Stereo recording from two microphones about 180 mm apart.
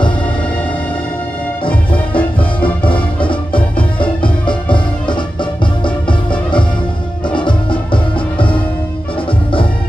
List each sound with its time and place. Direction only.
1.9 s music: 30° left (ahead or behind)